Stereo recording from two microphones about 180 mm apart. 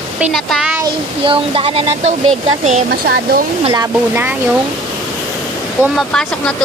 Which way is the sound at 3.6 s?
20° right (ahead or behind).